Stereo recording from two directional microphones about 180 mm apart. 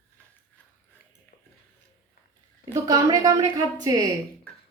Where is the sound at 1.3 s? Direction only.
55° left (ahead or behind).